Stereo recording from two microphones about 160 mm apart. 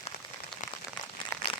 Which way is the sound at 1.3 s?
20° left (ahead or behind).